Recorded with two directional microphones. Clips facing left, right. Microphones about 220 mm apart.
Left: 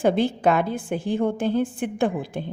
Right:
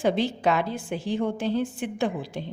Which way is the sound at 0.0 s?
55° left (ahead or behind).